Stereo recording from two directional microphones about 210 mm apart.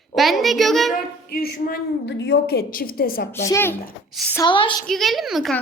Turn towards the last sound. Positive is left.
turn(degrees=0)  # may be behind; listen again after turning